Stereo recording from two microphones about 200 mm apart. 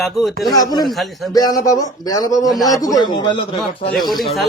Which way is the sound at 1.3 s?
20° left (ahead or behind).